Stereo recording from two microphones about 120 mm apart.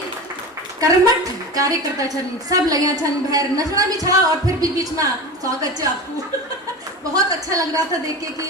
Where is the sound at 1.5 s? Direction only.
30° right (ahead or behind).